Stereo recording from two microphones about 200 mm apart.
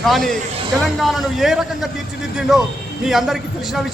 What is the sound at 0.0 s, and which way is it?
A man's voice, centre (ahead or behind).